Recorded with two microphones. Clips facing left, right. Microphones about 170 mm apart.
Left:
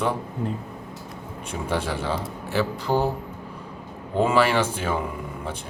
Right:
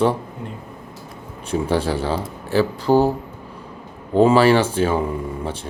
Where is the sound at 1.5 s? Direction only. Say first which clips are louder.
Right 7 dB; 35° right (ahead or behind).